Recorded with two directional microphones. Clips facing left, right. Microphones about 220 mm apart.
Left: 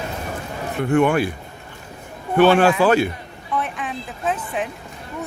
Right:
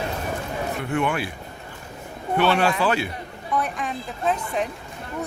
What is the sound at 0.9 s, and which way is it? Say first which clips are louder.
Speech: left 9 dB; 45° left (ahead or behind).